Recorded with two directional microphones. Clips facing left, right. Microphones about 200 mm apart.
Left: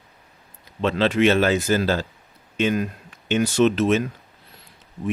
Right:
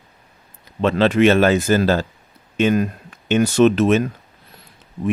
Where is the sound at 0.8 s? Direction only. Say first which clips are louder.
Right 4 dB; 55° right (ahead or behind).